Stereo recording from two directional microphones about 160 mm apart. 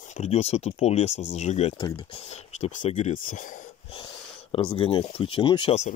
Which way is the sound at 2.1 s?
45° left (ahead or behind).